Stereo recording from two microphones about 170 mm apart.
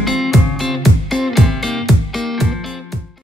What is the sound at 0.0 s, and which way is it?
Music, centre (ahead or behind).